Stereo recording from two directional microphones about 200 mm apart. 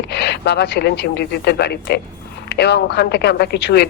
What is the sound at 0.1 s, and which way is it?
Speech, 55° left (ahead or behind).